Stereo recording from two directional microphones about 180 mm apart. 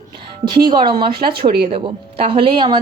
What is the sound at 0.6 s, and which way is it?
A woman's voice, 25° right (ahead or behind).